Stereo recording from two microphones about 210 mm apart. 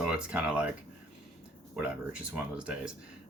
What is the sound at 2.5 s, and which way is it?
Speech, 5° right (ahead or behind).